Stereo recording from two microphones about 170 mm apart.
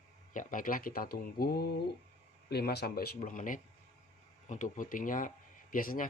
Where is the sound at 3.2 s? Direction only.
50° left (ahead or behind).